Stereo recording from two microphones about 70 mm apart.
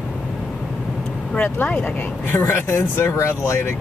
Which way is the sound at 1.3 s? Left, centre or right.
Left.